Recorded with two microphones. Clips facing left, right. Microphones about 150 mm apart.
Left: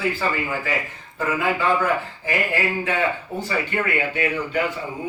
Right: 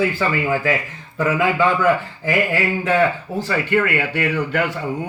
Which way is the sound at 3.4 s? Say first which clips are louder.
Right 6 dB; 90° right.